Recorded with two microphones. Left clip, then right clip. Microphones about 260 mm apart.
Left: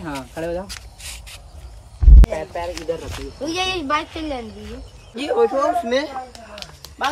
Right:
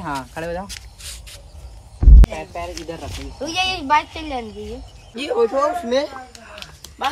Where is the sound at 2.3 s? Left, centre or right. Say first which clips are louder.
Left 3 dB; right.